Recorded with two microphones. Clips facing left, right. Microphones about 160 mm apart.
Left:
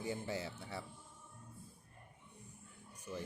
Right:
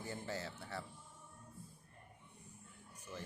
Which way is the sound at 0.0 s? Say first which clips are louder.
Left 3 dB; 15° left (ahead or behind).